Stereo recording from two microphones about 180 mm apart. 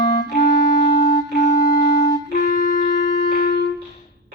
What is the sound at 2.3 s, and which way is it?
Music, 45° left (ahead or behind).